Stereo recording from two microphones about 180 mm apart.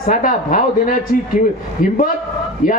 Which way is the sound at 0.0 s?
50° left (ahead or behind).